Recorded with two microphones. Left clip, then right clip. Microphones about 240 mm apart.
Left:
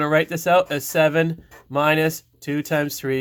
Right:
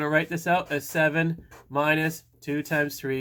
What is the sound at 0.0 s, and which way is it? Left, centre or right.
Speech, left.